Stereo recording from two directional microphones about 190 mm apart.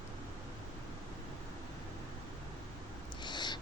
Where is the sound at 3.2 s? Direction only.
25° left (ahead or behind).